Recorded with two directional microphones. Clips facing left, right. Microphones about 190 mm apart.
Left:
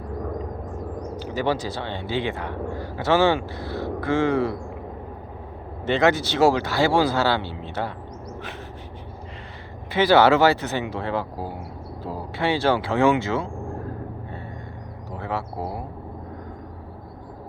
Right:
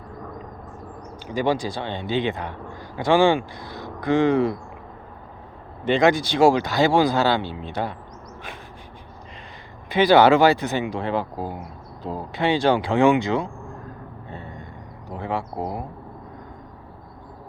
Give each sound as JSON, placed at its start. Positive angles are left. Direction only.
{"t": 1.5, "sound": "speech", "side_deg": -15}
{"t": 5.9, "sound": "speech", "side_deg": -15}
{"t": 9.9, "sound": "speech", "side_deg": -15}
{"t": 15.2, "sound": "speech", "side_deg": -15}